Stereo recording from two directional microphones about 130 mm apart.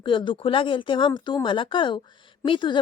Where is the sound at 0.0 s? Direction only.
40° left (ahead or behind).